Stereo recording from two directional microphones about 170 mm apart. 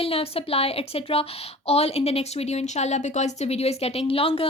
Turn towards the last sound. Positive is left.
turn(degrees=35)  # may be behind; listen again after turning